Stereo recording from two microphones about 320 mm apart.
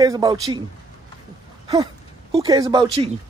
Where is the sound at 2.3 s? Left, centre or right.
Centre.